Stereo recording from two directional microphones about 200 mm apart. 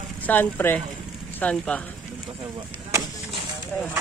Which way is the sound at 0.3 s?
10° left (ahead or behind).